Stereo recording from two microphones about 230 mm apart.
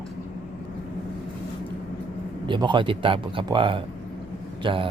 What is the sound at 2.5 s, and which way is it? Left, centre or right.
A man's voice, centre.